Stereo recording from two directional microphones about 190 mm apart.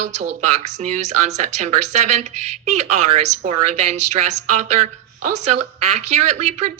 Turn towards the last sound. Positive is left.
turn(degrees=-35)  # may be behind; listen again after turning